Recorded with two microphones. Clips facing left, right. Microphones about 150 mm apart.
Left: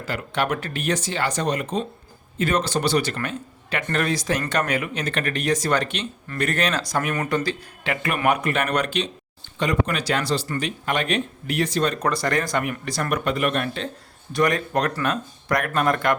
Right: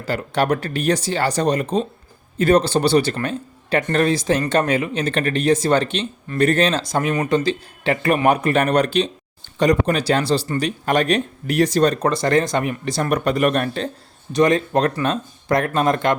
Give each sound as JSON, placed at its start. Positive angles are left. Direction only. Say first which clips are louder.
{"t": 0.0, "sound": "speech", "louder": "right 5 dB", "side_deg": -35}
{"t": 12.1, "sound": "speech", "louder": "right 5 dB", "side_deg": -25}
{"t": 14.3, "sound": "speech", "louder": "right 5 dB", "side_deg": -25}